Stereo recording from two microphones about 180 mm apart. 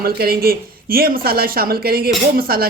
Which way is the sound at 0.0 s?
60° right (ahead or behind).